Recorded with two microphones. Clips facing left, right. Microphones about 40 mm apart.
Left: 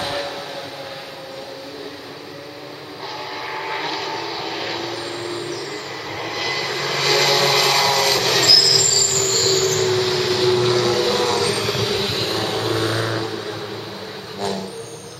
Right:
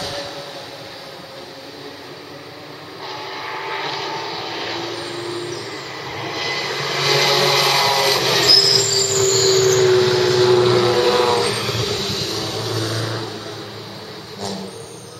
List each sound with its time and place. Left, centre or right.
0.0 s train: left
3.1 s vehicle: centre
12.1 s vehicle: left